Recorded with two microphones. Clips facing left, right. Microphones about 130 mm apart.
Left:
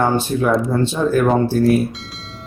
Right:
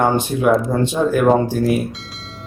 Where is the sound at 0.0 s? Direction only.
15° right (ahead or behind).